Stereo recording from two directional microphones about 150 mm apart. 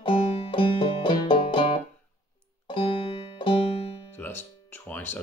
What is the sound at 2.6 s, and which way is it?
Music, 35° left (ahead or behind).